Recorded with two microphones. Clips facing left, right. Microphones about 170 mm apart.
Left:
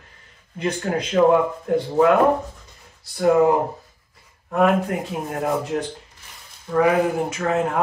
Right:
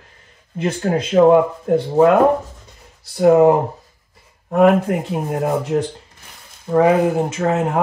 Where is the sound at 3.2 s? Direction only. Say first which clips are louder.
Right 5 dB; 25° right (ahead or behind).